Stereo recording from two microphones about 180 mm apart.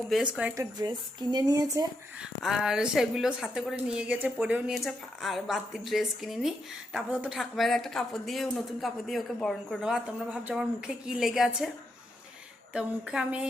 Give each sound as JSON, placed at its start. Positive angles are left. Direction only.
{"t": 0.1, "sound": "speech", "side_deg": -5}
{"t": 0.5, "sound": "speech", "side_deg": -20}
{"t": 2.4, "sound": "speech", "side_deg": -5}
{"t": 12.7, "sound": "speech", "side_deg": -5}